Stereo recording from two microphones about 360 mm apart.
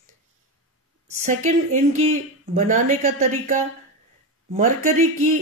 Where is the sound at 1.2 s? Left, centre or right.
Centre.